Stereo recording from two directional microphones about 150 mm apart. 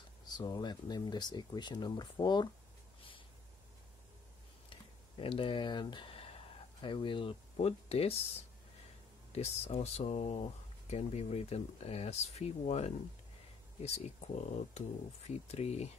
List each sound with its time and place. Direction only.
0.4 s speech: 30° left (ahead or behind)
4.6 s a sound: 35° left (ahead or behind)
6.8 s speech: 35° left (ahead or behind)
9.3 s speech: 45° left (ahead or behind)